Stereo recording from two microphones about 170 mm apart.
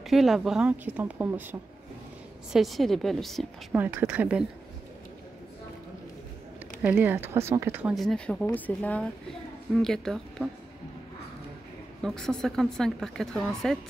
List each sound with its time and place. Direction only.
0.0 s a woman's voice: centre (ahead or behind)
2.5 s speech: centre (ahead or behind)
3.7 s a woman's voice: 10° right (ahead or behind)
6.8 s a woman's voice: 10° right (ahead or behind)
7.9 s speech: centre (ahead or behind)
12.0 s speech: centre (ahead or behind)